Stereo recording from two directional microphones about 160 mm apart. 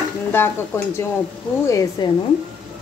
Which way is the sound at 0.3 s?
15° left (ahead or behind).